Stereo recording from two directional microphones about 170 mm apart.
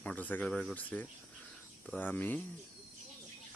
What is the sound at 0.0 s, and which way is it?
Speech, 10° left (ahead or behind).